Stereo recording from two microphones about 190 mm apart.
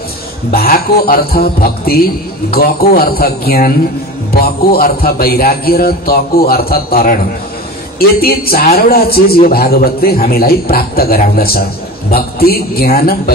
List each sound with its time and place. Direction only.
0.5 s a man's voice: 50° left (ahead or behind)
8.2 s a man's voice: 50° left (ahead or behind)